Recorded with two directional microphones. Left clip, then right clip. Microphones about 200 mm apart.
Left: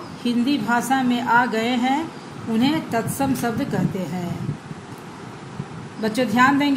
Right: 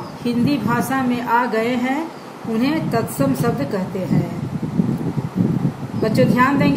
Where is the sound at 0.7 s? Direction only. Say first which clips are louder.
Even; 15° left (ahead or behind).